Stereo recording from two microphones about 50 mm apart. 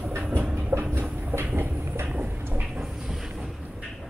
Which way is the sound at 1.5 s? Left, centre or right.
Right.